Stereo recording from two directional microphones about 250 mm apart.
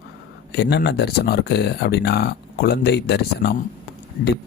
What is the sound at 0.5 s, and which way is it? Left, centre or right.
Speech, left.